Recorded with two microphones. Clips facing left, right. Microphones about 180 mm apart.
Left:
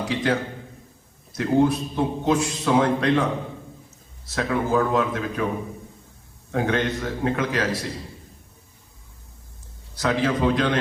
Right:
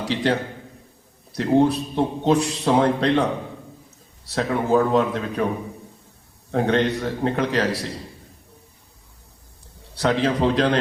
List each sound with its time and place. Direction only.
0.0 s a man's voice: 35° right (ahead or behind)
1.4 s a man's voice: 30° right (ahead or behind)
4.3 s a man's voice: 35° right (ahead or behind)
6.5 s a man's voice: 35° right (ahead or behind)
10.0 s a man's voice: 30° right (ahead or behind)